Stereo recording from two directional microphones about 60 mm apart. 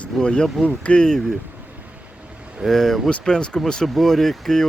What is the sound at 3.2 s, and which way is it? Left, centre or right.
Mantra, centre.